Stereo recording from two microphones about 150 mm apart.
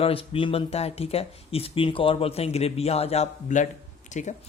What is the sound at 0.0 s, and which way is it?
Speech, 40° left (ahead or behind).